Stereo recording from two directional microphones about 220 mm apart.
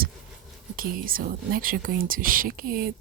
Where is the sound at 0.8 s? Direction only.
40° right (ahead or behind).